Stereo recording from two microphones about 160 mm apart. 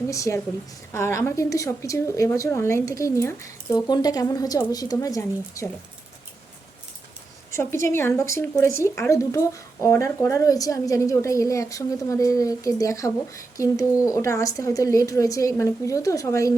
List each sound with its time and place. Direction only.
0.1 s speech: 20° left (ahead or behind)
7.5 s speech: 15° left (ahead or behind)